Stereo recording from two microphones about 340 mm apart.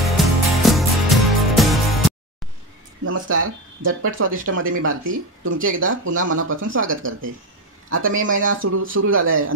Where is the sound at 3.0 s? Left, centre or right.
Right.